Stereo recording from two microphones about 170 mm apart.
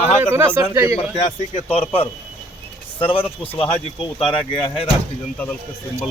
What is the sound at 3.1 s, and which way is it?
Speech, 30° left (ahead or behind).